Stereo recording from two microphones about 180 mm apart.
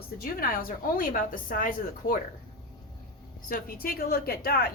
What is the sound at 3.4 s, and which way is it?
A woman's voice, 55° left (ahead or behind).